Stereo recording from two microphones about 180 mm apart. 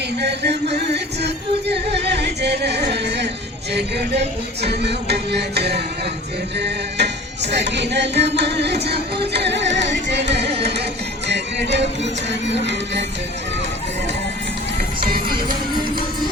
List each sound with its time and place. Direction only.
0.2 s music: 70° right (ahead or behind)
10.4 s music: 35° right (ahead or behind)
11.3 s speech: 75° right (ahead or behind)
12.5 s music: 75° right (ahead or behind)
15.0 s music: 55° right (ahead or behind)